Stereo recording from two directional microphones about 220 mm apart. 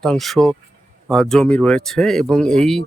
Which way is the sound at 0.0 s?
Centre (ahead or behind).